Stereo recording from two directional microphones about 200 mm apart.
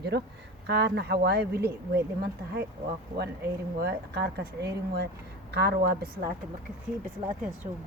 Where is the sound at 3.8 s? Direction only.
55° right (ahead or behind).